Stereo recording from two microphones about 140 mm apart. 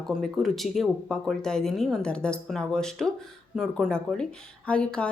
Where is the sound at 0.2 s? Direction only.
Centre (ahead or behind).